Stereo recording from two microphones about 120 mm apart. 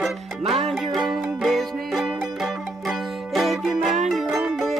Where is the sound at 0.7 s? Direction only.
Centre (ahead or behind).